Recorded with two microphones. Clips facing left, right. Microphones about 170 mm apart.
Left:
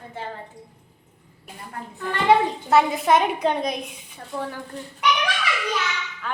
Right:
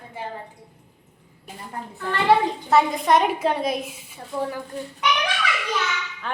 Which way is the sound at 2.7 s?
Centre (ahead or behind).